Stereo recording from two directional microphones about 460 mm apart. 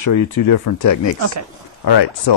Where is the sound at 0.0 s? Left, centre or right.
Left.